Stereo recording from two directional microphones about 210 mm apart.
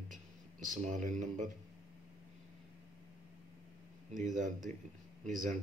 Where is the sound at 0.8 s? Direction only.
35° right (ahead or behind).